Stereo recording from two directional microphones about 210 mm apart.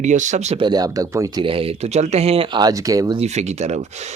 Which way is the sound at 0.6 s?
20° right (ahead or behind).